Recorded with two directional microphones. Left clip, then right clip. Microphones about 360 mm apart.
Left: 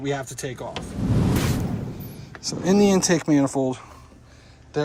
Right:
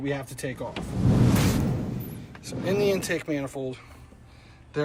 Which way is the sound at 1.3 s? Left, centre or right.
Centre.